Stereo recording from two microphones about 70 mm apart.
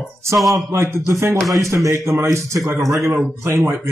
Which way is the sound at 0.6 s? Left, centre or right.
Right.